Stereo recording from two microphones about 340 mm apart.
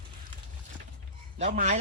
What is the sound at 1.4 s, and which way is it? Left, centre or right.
Speech, right.